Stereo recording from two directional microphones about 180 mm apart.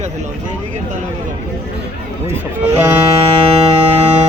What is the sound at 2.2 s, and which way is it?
Speech, 10° right (ahead or behind).